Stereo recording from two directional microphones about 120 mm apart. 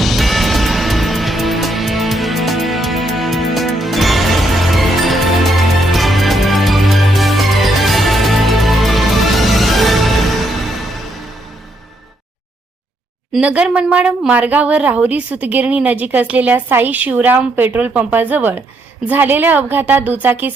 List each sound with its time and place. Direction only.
0.0 s music: centre (ahead or behind)
13.4 s a woman's voice: 10° right (ahead or behind)